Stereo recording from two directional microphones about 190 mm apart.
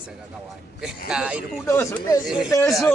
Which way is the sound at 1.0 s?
5° right (ahead or behind).